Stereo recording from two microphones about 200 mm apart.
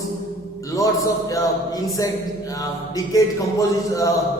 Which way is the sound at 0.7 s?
15° left (ahead or behind).